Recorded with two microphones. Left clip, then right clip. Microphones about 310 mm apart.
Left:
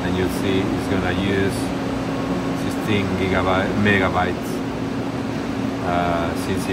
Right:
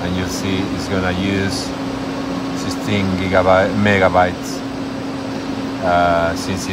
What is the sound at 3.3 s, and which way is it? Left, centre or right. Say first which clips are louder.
Speech: right 9 dB; right.